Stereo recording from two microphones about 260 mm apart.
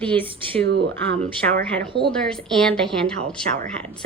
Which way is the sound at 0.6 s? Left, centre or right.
Right.